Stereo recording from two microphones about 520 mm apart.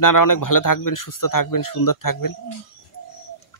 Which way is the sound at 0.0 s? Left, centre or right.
Left.